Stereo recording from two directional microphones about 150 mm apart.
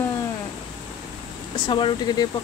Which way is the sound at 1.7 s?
35° left (ahead or behind).